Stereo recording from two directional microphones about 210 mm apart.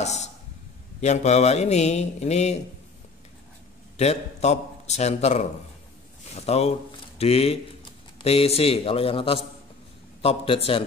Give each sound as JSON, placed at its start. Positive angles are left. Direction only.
{"t": 0.0, "sound": "a man's voice", "side_deg": 30}
{"t": 3.9, "sound": "a man's voice", "side_deg": 30}